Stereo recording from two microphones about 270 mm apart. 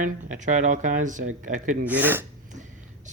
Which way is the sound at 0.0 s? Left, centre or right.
Right.